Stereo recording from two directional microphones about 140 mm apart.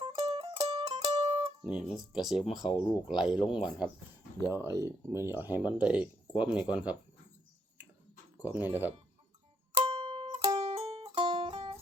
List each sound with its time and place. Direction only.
0.2 s music: 30° right (ahead or behind)
0.7 s music: 45° right (ahead or behind)
1.6 s speech: 5° right (ahead or behind)
4.4 s speech: 20° right (ahead or behind)
8.4 s speech: 15° right (ahead or behind)
9.7 s music: 35° right (ahead or behind)
10.6 s music: 45° right (ahead or behind)